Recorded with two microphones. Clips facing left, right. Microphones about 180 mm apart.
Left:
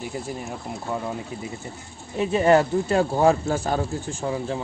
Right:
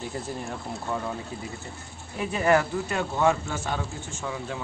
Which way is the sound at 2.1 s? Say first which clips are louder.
Left 5 dB; 25° left (ahead or behind).